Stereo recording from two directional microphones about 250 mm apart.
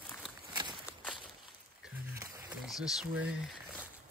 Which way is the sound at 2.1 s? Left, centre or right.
Centre.